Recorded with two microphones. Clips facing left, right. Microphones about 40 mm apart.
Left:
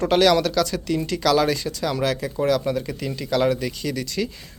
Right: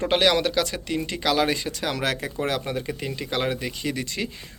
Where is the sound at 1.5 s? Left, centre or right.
Right.